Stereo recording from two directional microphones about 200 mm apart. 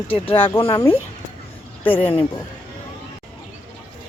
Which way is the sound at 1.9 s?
25° left (ahead or behind).